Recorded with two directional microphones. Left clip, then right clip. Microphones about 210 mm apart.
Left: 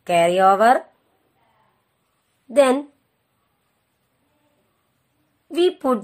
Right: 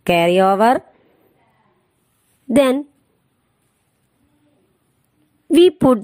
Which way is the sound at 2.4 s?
35° right (ahead or behind).